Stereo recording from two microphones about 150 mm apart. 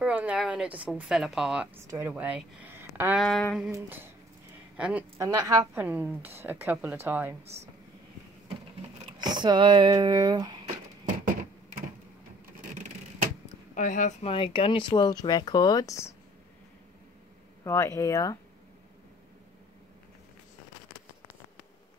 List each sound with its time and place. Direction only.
0.0 s speech: 10° right (ahead or behind)
3.2 s speech: 5° left (ahead or behind)
3.7 s speech: 15° right (ahead or behind)
5.2 s speech: 20° right (ahead or behind)
5.8 s speech: 10° right (ahead or behind)
9.2 s speech: 30° right (ahead or behind)
13.7 s speech: 55° left (ahead or behind)
14.2 s speech: 35° left (ahead or behind); by 16.2 s 20° left (ahead or behind)
17.6 s speech: 20° left (ahead or behind)